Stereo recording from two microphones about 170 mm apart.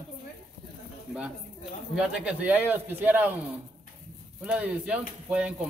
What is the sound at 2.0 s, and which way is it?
A man's voice, 5° right (ahead or behind).